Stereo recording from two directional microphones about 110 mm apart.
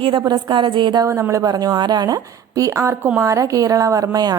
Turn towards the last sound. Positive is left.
turn(degrees=-35)  # may be behind; listen again after turning